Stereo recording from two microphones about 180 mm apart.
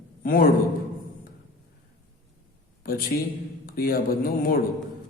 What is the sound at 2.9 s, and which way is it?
A man's voice, 55° left (ahead or behind).